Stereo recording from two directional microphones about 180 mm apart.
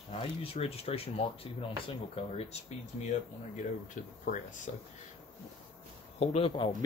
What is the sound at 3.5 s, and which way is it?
Speech, 45° left (ahead or behind).